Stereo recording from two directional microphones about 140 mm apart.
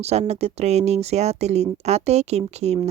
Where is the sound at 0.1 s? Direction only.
50° right (ahead or behind).